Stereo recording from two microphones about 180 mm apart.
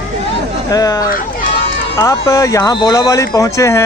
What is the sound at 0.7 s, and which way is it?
Speech, 20° left (ahead or behind).